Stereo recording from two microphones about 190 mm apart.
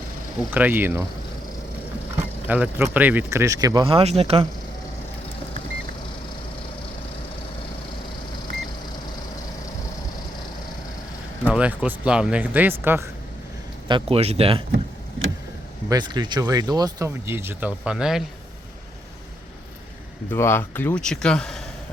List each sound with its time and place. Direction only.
0.5 s speech: 10° right (ahead or behind)
2.5 s speech: 10° right (ahead or behind); by 4.4 s 30° right (ahead or behind)
11.4 s speech: 5° right (ahead or behind)
13.8 s speech: 25° right (ahead or behind)
15.9 s speech: 20° right (ahead or behind); by 18.2 s 5° right (ahead or behind)
20.3 s speech: 15° left (ahead or behind)